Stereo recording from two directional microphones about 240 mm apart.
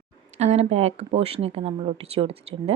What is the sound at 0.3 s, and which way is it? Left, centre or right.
Speech, right.